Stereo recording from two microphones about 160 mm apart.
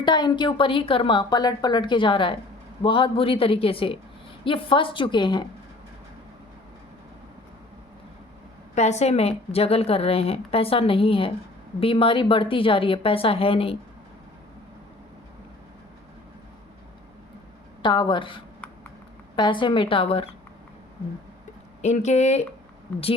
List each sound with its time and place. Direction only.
0.0 s a woman's voice: 30° left (ahead or behind)
8.7 s a woman's voice: 45° left (ahead or behind)
17.8 s a woman's voice: 30° left (ahead or behind)
21.8 s speech: 45° left (ahead or behind)